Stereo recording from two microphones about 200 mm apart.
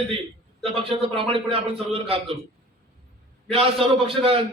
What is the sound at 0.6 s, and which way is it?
A man's voice, 25° right (ahead or behind).